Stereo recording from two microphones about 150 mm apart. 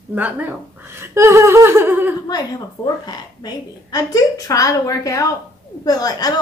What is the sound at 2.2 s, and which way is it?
A woman's voice, 25° left (ahead or behind).